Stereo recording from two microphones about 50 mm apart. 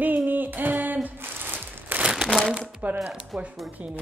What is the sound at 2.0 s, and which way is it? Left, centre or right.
Crumpling, centre.